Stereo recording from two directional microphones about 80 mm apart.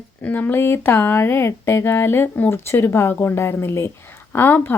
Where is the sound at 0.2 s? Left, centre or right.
Left.